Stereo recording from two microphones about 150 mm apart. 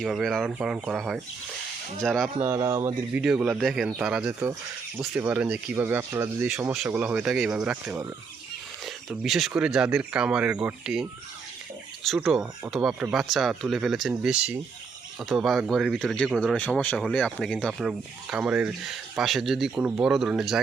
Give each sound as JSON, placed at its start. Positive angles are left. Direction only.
{"t": 0.0, "sound": "speech", "side_deg": 0}
{"t": 2.4, "sound": "speech", "side_deg": -20}
{"t": 3.1, "sound": "speech", "side_deg": -10}
{"t": 9.0, "sound": "speech", "side_deg": 0}
{"t": 12.0, "sound": "speech", "side_deg": 0}
{"t": 16.6, "sound": "speech", "side_deg": 10}